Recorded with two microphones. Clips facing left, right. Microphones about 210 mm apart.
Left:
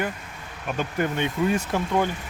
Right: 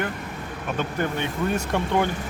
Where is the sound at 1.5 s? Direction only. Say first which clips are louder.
Right 1 dB; 5° left (ahead or behind).